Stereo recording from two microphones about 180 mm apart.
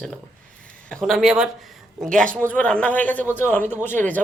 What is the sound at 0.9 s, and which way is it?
Speech, centre (ahead or behind).